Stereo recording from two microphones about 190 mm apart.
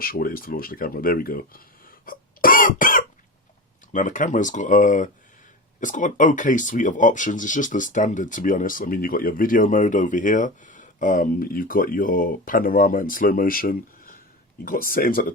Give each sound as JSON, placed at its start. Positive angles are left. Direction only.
{"t": 0.0, "sound": "speech", "side_deg": 50}